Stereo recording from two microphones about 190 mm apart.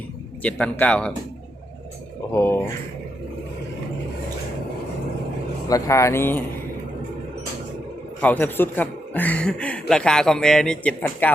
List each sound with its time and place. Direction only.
0.4 s a man's voice: 5° left (ahead or behind)
2.3 s a man's voice: 10° left (ahead or behind)
5.6 s a man's voice: 15° left (ahead or behind)
8.2 s a man's voice: 10° left (ahead or behind)